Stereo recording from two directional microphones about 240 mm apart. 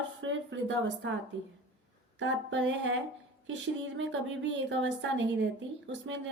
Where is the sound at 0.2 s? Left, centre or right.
Right.